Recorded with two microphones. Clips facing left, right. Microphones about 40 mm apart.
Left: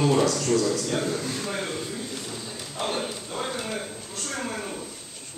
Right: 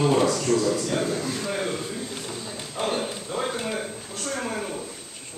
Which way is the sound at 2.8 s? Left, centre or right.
Centre.